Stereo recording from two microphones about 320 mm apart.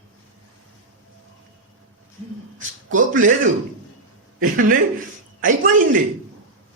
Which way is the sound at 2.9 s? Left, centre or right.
Right.